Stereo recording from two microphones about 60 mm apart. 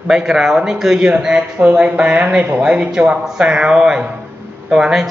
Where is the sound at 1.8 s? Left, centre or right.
Right.